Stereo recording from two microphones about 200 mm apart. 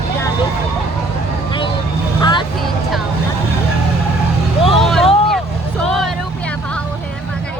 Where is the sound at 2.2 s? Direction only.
25° left (ahead or behind).